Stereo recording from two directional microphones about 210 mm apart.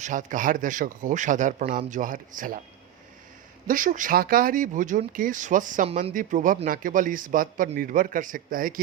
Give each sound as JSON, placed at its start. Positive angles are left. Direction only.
{"t": 0.0, "sound": "speech", "side_deg": -35}
{"t": 3.7, "sound": "speech", "side_deg": -40}